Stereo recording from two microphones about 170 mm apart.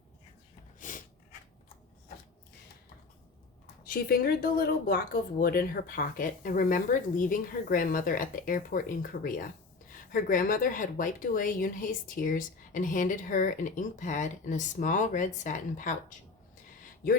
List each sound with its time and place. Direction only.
0.8 s snort: 50° left (ahead or behind)
3.8 s speech: 65° left (ahead or behind)